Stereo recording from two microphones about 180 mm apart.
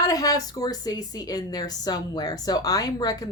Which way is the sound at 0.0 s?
20° left (ahead or behind).